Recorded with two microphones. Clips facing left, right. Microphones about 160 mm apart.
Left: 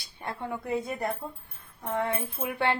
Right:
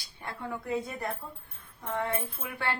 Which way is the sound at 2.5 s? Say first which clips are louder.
Left 5 dB; 25° left (ahead or behind).